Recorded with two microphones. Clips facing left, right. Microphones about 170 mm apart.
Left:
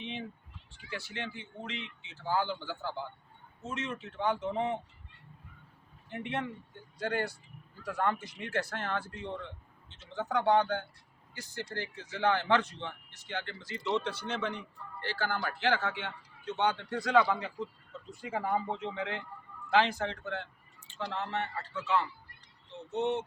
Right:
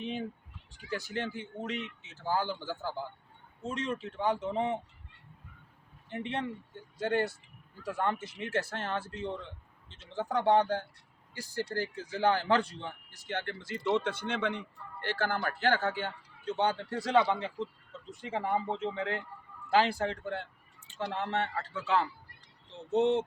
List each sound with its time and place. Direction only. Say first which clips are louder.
0.0 s a sound: right 4 dB; 40° right (ahead or behind)
0.9 s speech: right 5 dB; 40° right (ahead or behind)
6.1 s speech: right 1 dB; 30° right (ahead or behind)
13.2 s speech: right 3 dB; 50° right (ahead or behind); by 18.6 s 25° right (ahead or behind)
18.6 s speech: right 2 dB; centre (ahead or behind)
19.7 s speech: right 1 dB; 35° right (ahead or behind)
21.0 s a man's voice: right 2 dB; 55° right (ahead or behind); by 23.2 s 90° right